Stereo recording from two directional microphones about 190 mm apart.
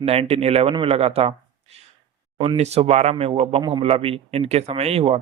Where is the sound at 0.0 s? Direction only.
30° right (ahead or behind).